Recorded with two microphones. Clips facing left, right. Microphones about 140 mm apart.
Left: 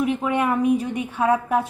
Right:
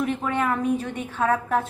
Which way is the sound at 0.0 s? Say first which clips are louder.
Left 3 dB; 10° left (ahead or behind).